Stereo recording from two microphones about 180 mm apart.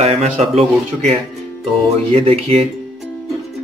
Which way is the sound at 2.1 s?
30° right (ahead or behind).